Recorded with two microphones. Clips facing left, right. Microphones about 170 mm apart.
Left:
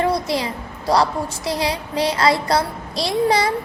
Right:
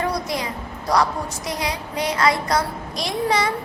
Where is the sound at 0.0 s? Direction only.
30° left (ahead or behind).